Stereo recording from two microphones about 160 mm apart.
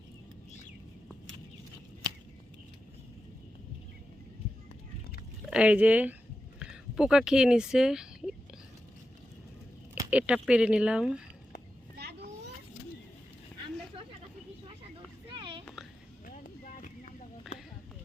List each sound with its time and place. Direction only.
5.5 s speech: 5° right (ahead or behind)
10.1 s speech: 10° right (ahead or behind)
11.9 s children playing: 90° right
14.7 s vehicle: 35° right (ahead or behind)
16.2 s vehicle: 55° left (ahead or behind)
17.5 s a sound: centre (ahead or behind)